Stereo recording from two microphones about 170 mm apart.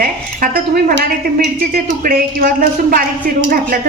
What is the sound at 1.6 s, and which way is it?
A woman's voice, 60° right (ahead or behind).